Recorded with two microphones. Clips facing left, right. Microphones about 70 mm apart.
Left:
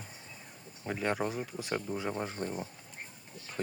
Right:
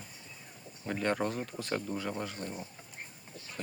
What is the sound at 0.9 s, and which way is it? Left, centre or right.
Speech, centre.